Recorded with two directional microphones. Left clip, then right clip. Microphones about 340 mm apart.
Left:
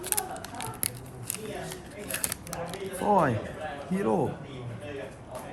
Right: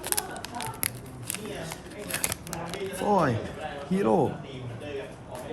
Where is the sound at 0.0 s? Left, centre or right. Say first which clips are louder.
Right 1 dB; centre.